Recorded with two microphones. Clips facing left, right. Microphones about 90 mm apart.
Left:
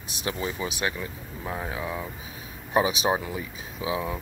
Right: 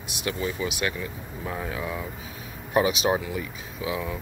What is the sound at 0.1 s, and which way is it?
Speech, 30° left (ahead or behind).